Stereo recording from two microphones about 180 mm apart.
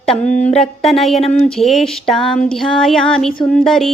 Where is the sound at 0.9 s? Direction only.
Centre (ahead or behind).